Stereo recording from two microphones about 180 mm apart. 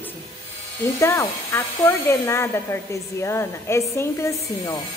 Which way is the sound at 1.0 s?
15° left (ahead or behind).